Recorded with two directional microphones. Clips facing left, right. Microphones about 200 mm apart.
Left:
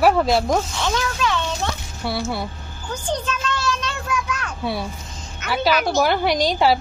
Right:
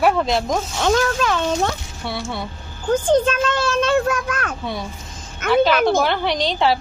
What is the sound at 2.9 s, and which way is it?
A child's voice, 50° right (ahead or behind).